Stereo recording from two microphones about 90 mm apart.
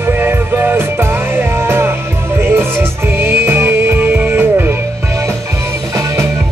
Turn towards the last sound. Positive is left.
turn(degrees=-25)  # may be behind; listen again after turning